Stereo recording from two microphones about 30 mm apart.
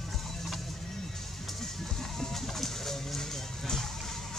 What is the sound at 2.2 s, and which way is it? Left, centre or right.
Bird, centre.